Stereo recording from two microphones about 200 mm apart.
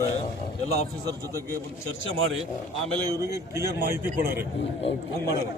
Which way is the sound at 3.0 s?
15° right (ahead or behind).